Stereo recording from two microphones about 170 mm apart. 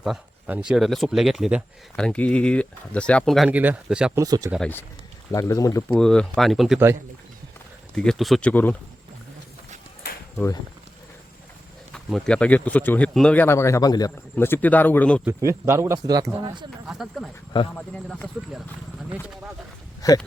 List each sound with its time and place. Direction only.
0.0 s speech: 5° right (ahead or behind)
2.0 s speech: 5° left (ahead or behind)
4.1 s speech: 20° right (ahead or behind)
5.3 s speech: 20° left (ahead or behind)
5.9 s speech: 5° left (ahead or behind)
7.9 s speech: centre (ahead or behind)
11.9 s speech: 5° left (ahead or behind)
15.2 s speech: 15° right (ahead or behind)
16.8 s speech: 5° right (ahead or behind)
17.7 s speech: 5° left (ahead or behind)
20.0 s speech: 20° left (ahead or behind)